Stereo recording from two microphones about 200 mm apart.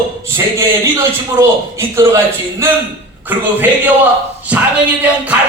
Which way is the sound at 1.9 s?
15° right (ahead or behind).